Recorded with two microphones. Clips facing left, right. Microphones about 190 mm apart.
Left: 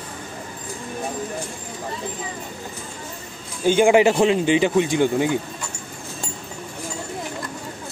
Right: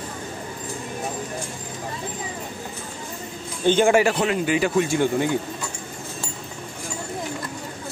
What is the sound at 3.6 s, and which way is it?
Speech, 15° left (ahead or behind).